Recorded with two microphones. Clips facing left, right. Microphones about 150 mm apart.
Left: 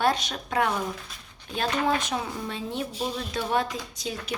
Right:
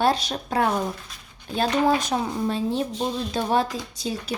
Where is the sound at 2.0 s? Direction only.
35° right (ahead or behind).